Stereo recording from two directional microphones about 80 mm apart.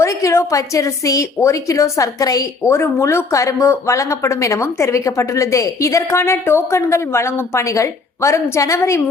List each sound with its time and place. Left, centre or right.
0.0 s a woman's voice: left
2.6 s speech: left